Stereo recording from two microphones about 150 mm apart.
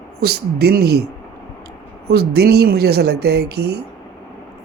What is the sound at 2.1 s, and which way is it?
Speech, 90° right.